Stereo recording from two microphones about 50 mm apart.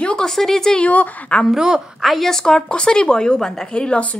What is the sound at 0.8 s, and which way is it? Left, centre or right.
Speech, left.